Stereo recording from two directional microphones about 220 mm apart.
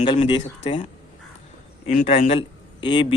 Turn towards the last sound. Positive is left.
turn(degrees=20)  # may be behind; listen again after turning